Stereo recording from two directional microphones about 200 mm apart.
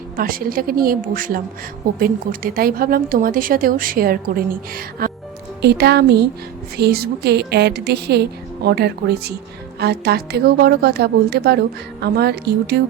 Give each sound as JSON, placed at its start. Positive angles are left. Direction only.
{"t": 0.2, "sound": "a woman's voice", "side_deg": -45}